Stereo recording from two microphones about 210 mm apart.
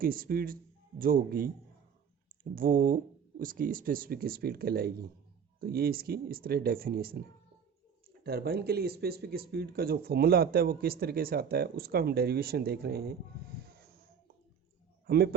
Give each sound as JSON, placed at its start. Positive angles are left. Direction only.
{"t": 0.0, "sound": "speech", "side_deg": -45}
{"t": 8.2, "sound": "speech", "side_deg": -45}
{"t": 15.0, "sound": "speech", "side_deg": -50}